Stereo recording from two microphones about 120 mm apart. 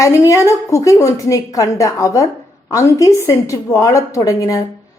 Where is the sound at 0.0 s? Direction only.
25° left (ahead or behind).